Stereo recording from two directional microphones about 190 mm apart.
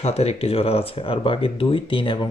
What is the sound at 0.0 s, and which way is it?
Speech, 35° left (ahead or behind).